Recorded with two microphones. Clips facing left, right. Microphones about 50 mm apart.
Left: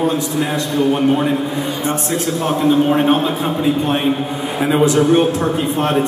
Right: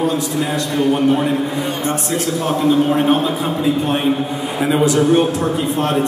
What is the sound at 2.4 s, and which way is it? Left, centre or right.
Speech, left.